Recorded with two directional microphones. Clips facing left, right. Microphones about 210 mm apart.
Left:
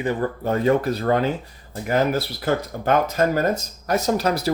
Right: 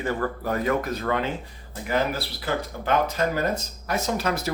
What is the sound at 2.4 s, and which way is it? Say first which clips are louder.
Speech: left 4 dB; 45° left (ahead or behind).